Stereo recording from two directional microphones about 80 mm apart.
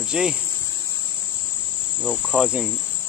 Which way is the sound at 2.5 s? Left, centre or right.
Centre.